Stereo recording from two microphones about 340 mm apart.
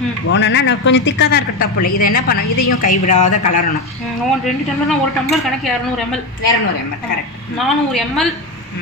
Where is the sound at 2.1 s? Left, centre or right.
Left.